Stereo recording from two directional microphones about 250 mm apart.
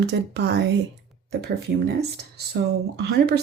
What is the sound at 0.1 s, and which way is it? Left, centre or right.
Speech, right.